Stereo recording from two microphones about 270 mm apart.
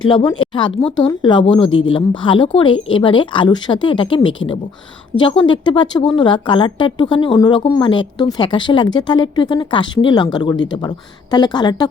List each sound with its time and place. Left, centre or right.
0.1 s speech: centre